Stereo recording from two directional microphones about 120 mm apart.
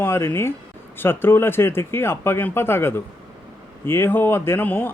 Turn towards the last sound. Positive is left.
turn(degrees=15)  # may be behind; listen again after turning